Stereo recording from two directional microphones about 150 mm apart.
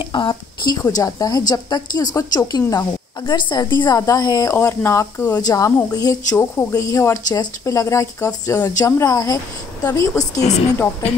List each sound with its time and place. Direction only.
0.1 s a woman's voice: 30° left (ahead or behind)